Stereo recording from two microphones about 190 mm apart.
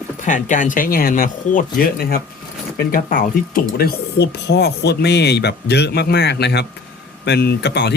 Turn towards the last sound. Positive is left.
turn(degrees=65)  # may be behind; listen again after turning